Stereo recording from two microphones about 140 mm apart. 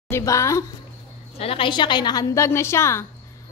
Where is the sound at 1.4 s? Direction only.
40° left (ahead or behind).